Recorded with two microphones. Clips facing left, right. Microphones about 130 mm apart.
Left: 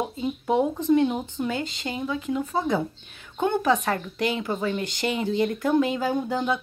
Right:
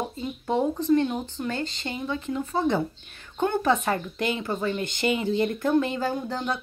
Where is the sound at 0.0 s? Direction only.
10° left (ahead or behind).